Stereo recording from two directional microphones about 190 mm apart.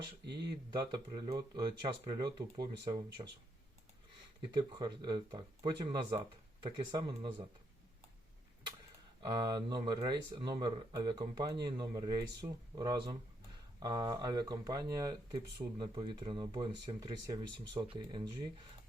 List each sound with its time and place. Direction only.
0.7 s speech: 20° right (ahead or behind)
4.7 s speech: 20° right (ahead or behind)
9.2 s speech: 20° right (ahead or behind)